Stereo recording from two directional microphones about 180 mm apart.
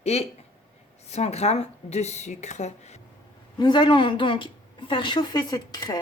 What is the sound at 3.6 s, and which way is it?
Speech, 25° left (ahead or behind).